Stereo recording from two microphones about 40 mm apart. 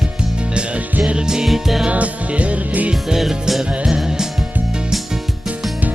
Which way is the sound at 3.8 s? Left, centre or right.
Centre.